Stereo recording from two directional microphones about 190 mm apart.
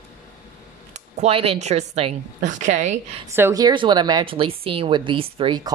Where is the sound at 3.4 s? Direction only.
15° right (ahead or behind).